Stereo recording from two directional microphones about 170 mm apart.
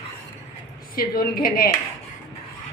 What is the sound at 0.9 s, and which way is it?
Speech, 60° left (ahead or behind).